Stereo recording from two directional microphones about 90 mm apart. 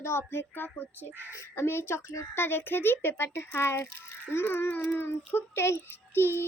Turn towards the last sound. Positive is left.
turn(degrees=25)  # may be behind; listen again after turning